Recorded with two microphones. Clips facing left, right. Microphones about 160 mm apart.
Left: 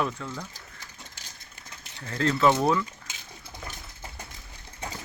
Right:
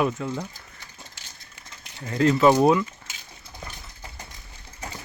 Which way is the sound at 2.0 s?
10° right (ahead or behind).